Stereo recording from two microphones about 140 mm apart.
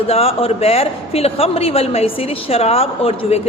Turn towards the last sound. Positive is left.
turn(degrees=45)  # may be behind; listen again after turning